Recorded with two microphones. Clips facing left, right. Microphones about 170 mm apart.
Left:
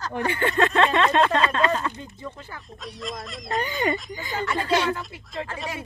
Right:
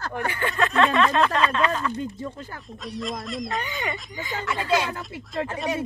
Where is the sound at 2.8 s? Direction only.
Centre (ahead or behind).